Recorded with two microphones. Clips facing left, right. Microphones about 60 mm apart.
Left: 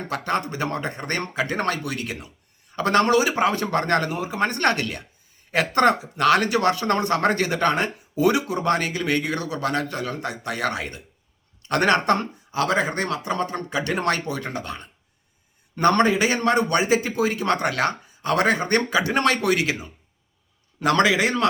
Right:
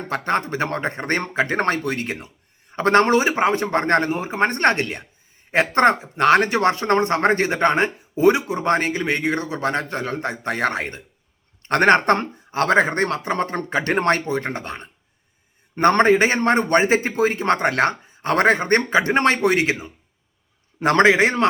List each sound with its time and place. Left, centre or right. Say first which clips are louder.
0.1 s speech: right 4 dB; right